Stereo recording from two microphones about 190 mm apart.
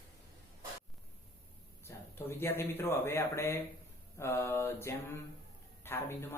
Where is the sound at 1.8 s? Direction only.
10° left (ahead or behind).